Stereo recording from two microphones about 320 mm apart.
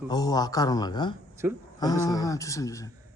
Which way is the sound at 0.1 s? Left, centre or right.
Centre.